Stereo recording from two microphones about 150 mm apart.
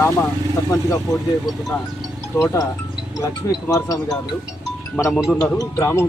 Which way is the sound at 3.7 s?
25° left (ahead or behind).